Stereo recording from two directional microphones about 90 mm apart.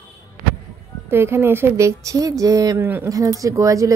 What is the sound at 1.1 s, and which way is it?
Speech, 25° right (ahead or behind).